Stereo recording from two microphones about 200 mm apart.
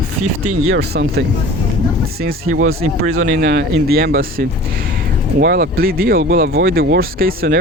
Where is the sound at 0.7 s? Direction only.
55° right (ahead or behind).